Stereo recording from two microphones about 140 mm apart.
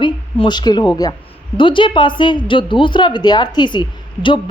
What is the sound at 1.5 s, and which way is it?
A woman's voice, 35° left (ahead or behind).